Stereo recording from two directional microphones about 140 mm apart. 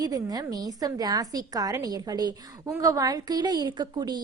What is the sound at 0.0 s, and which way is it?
A woman's voice, 25° right (ahead or behind).